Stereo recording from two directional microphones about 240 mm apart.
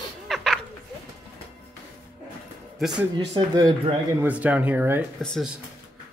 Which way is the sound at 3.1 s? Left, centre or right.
Centre.